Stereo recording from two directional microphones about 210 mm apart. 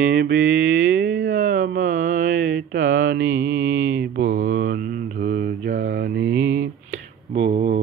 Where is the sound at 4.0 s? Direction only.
55° right (ahead or behind).